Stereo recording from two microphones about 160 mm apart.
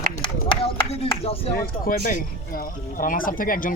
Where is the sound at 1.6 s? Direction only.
65° left (ahead or behind).